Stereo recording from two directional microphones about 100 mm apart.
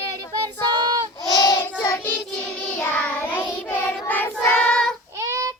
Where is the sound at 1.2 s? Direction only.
40° left (ahead or behind).